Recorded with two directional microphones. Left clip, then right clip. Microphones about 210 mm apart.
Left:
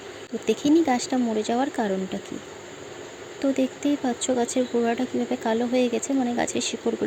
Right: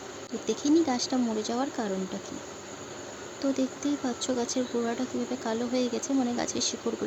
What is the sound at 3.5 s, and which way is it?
Speech, 15° left (ahead or behind).